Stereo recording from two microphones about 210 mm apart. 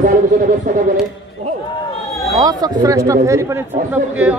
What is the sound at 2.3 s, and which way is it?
A man's voice, 20° right (ahead or behind).